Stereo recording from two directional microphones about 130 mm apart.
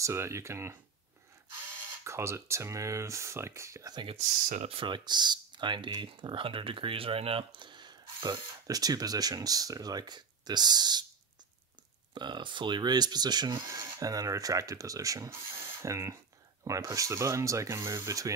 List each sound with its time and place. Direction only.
0.0 s speech: 20° right (ahead or behind)
2.0 s speech: 20° right (ahead or behind)
4.6 s speech: 40° right (ahead or behind)
12.1 s speech: 35° right (ahead or behind)